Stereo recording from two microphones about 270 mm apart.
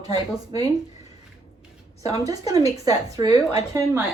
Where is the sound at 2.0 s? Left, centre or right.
Centre.